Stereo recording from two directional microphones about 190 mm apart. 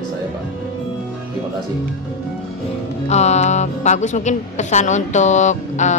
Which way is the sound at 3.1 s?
35° left (ahead or behind).